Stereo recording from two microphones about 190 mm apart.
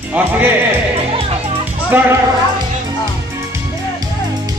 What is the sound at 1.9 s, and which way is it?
Speech, 10° right (ahead or behind).